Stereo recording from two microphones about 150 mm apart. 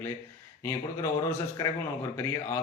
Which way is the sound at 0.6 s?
20° left (ahead or behind).